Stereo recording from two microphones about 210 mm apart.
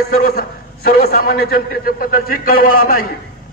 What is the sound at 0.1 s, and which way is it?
A man's voice, 45° left (ahead or behind).